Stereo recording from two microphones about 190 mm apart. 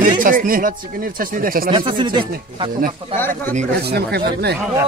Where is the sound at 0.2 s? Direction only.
45° right (ahead or behind).